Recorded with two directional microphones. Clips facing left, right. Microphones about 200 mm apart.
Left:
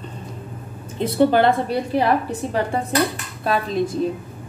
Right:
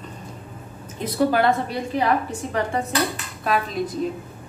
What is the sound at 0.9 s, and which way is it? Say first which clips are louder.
A woman's voice: left 4 dB; 30° left (ahead or behind).